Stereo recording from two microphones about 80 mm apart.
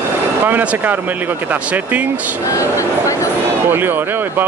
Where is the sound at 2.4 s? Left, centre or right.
Left.